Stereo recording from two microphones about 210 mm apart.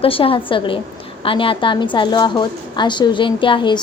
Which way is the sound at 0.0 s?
25° left (ahead or behind).